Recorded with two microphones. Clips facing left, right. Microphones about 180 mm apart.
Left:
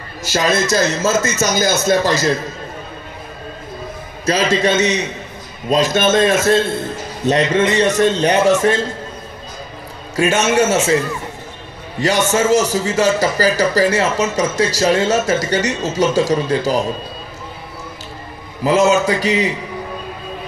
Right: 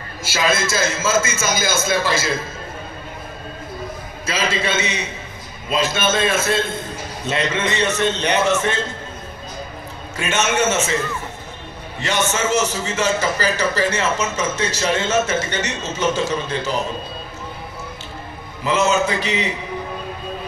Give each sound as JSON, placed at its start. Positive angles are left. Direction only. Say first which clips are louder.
{"t": 0.3, "sound": "a man's voice", "louder": "left 4 dB", "side_deg": 40}
{"t": 4.3, "sound": "a man's voice", "louder": "left 7 dB", "side_deg": 40}
{"t": 10.1, "sound": "a man's voice", "louder": "left 6 dB", "side_deg": 40}
{"t": 12.0, "sound": "a man's voice", "louder": "left 6 dB", "side_deg": 40}
{"t": 18.9, "sound": "a man's voice", "louder": "left 4 dB", "side_deg": 40}